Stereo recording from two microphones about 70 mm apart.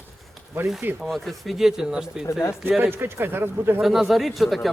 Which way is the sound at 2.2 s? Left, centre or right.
Left.